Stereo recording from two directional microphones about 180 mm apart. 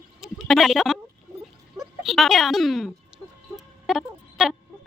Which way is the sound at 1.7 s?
Centre (ahead or behind).